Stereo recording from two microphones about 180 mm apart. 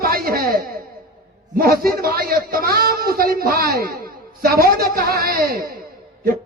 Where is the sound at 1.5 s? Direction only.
55° right (ahead or behind).